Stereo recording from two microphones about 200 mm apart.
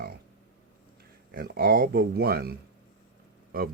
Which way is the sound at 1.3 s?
50° right (ahead or behind).